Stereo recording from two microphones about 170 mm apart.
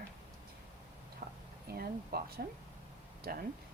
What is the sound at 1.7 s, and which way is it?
Speech, 65° right (ahead or behind).